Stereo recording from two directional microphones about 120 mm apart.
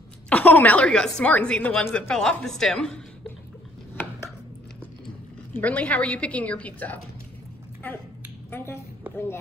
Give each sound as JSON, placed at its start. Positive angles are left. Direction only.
{"t": 0.3, "sound": "a woman's voice", "side_deg": 15}
{"t": 5.6, "sound": "a woman's voice", "side_deg": 10}
{"t": 8.5, "sound": "a woman's voice", "side_deg": 20}